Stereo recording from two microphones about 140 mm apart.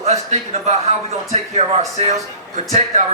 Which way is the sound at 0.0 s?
50° right (ahead or behind).